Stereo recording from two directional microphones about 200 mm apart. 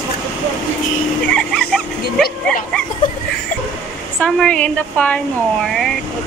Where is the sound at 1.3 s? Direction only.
5° left (ahead or behind).